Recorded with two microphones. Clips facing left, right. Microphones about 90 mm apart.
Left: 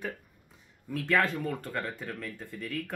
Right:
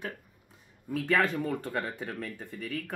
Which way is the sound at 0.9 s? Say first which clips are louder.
Right 1 dB; 15° right (ahead or behind).